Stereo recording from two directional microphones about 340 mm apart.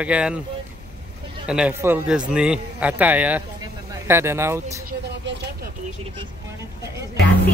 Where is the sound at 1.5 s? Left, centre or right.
Centre.